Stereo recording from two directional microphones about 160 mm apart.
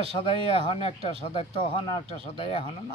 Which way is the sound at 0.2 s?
35° left (ahead or behind).